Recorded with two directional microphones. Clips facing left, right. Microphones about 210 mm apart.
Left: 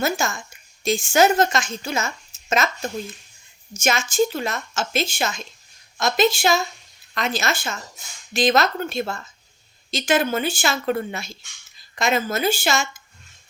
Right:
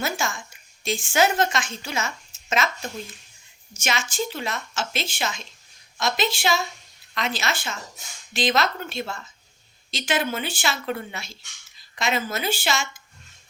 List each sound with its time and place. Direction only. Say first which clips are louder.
0.0 s a woman's voice: left 4 dB; 40° left (ahead or behind)
3.8 s a woman's voice: left 7 dB; 45° left (ahead or behind)